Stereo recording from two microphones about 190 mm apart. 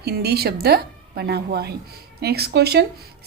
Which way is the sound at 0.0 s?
55° right (ahead or behind).